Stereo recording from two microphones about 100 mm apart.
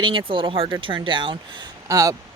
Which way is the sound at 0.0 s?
55° right (ahead or behind).